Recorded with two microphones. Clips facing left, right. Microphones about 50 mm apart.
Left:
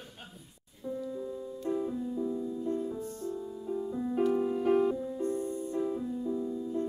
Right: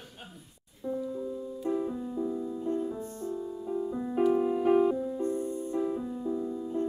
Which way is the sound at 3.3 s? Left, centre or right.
Centre.